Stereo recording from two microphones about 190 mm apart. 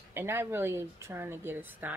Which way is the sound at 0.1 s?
10° right (ahead or behind).